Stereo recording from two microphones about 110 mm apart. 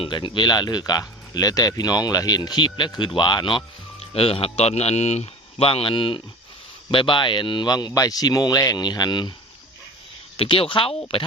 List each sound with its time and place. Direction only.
0.0 s speech: 45° left (ahead or behind)
4.0 s speech: 60° left (ahead or behind); by 9.3 s 40° left (ahead or behind)
10.3 s speech: 55° left (ahead or behind)